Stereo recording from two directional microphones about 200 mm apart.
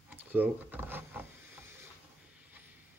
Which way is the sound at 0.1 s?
10° right (ahead or behind).